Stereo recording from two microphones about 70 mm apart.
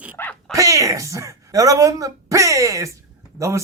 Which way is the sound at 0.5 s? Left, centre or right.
Right.